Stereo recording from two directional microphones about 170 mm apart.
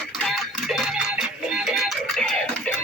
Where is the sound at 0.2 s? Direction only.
Centre (ahead or behind).